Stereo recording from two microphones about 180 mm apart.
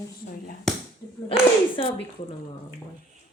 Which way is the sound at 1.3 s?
30° left (ahead or behind).